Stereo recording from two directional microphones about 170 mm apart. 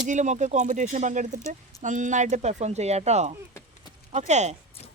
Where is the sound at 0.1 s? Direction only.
45° right (ahead or behind).